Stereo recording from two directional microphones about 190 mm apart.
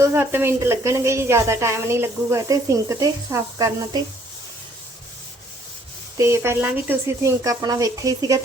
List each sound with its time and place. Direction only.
0.0 s speech: 15° right (ahead or behind)
6.1 s speech: 15° right (ahead or behind)